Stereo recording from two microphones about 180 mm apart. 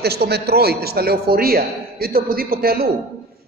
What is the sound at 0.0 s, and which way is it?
A man's voice, 65° right (ahead or behind).